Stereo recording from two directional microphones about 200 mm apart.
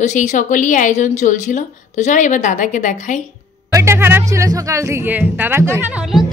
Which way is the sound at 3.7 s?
15° right (ahead or behind).